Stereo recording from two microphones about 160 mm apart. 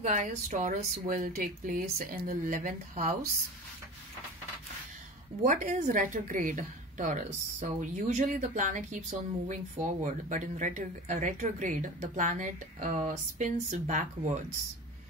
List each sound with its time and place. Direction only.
0.0 s speech: 50° right (ahead or behind)
5.4 s a woman's voice: 50° right (ahead or behind)